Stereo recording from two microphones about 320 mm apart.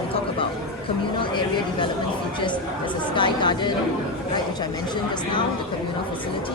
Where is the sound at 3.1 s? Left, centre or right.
Centre.